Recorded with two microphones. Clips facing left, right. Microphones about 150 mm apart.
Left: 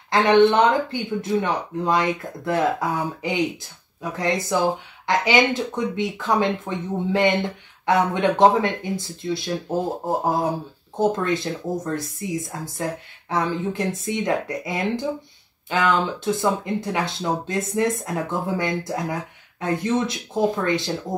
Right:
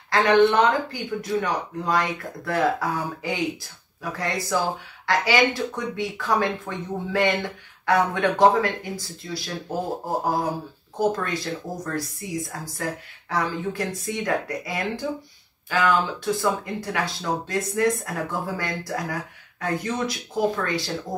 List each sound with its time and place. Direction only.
0.1 s speech: 20° left (ahead or behind)
11.0 s speech: 25° left (ahead or behind)